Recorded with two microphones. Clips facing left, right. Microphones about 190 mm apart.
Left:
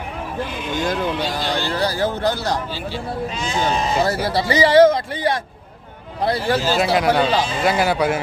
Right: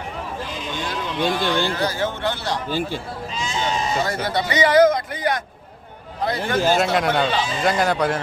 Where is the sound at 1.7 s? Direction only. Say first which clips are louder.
Left 3 dB; 35° left (ahead or behind).